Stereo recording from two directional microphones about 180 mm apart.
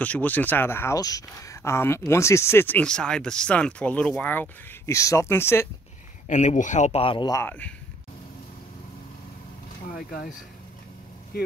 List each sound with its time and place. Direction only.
0.0 s speech: 10° left (ahead or behind)
6.2 s a man's voice: 40° left (ahead or behind); by 7.7 s 10° left (ahead or behind)
9.8 s speech: 55° left (ahead or behind)
11.3 s speech: 60° left (ahead or behind)